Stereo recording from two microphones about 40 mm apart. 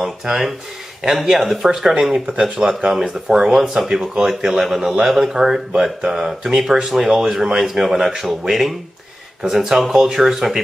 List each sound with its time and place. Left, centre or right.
0.0 s speech: centre